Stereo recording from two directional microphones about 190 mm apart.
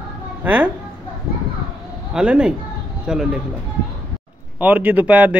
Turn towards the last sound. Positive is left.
turn(degrees=-10)  # may be behind; listen again after turning